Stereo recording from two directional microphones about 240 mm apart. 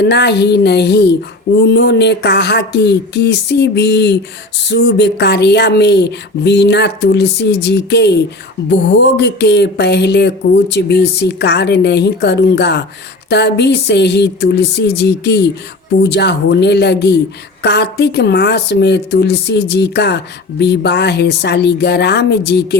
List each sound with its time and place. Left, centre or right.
0.0 s speech: left